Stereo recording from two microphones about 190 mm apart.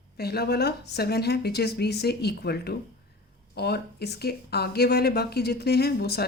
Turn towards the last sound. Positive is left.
turn(degrees=55)  # may be behind; listen again after turning